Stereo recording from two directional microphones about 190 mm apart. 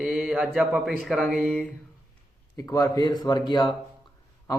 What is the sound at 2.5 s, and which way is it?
Speech, 20° left (ahead or behind).